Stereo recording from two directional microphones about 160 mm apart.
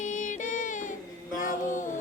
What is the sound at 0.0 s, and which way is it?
Music, 55° left (ahead or behind).